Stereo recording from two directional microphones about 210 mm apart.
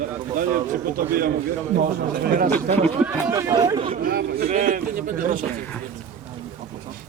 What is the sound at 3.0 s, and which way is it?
Speech, 15° right (ahead or behind).